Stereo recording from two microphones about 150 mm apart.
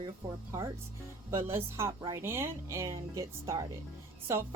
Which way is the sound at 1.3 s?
20° right (ahead or behind).